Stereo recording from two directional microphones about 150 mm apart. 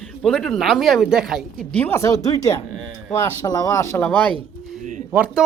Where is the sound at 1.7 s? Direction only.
15° left (ahead or behind).